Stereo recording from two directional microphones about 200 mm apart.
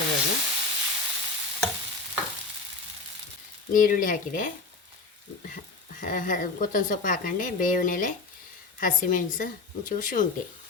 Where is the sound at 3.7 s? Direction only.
40° left (ahead or behind).